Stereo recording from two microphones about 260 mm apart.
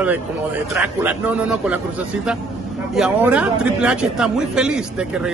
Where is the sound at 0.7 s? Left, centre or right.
Centre.